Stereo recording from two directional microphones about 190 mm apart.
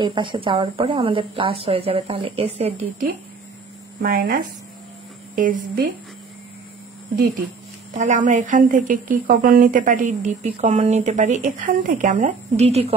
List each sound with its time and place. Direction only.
0.0 s a woman's voice: 25° right (ahead or behind)
4.0 s a woman's voice: 50° right (ahead or behind)
5.3 s a woman's voice: 45° right (ahead or behind)
7.9 s a woman's voice: 40° right (ahead or behind)